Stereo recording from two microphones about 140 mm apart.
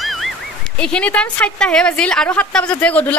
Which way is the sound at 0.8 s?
5° left (ahead or behind).